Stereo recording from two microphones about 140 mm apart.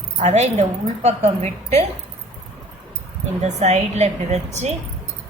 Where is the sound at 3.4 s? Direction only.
50° right (ahead or behind).